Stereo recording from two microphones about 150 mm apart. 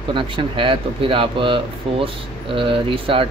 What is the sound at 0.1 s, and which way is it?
Speech, 35° right (ahead or behind).